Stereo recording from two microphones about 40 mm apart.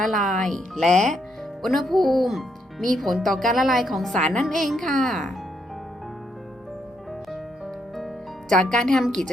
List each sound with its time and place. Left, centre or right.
0.0 s speech: centre
8.4 s a woman's voice: left